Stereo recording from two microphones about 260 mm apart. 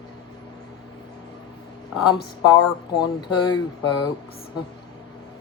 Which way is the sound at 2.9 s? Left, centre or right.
Centre.